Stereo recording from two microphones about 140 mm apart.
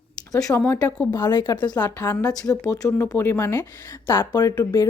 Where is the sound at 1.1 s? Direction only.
30° left (ahead or behind).